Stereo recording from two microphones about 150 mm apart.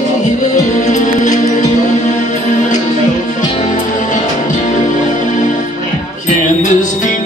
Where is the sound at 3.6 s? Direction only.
55° left (ahead or behind).